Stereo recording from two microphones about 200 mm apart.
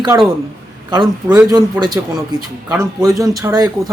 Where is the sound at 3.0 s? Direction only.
15° right (ahead or behind).